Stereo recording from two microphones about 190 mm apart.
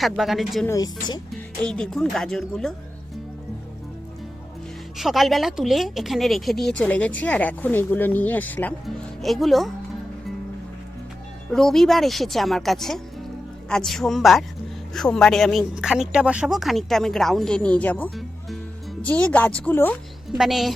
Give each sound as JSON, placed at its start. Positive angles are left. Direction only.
{"t": 0.0, "sound": "speech", "side_deg": 0}
{"t": 0.7, "sound": "speech", "side_deg": 20}
{"t": 1.6, "sound": "speech", "side_deg": 5}
{"t": 4.9, "sound": "speech", "side_deg": 0}
{"t": 11.5, "sound": "speech", "side_deg": 0}